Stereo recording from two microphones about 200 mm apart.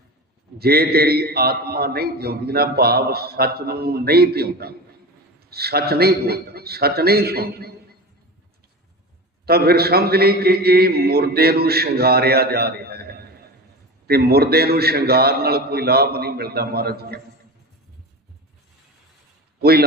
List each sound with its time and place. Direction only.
0.6 s a man's voice: 50° right (ahead or behind)
9.5 s a man's voice: 50° right (ahead or behind)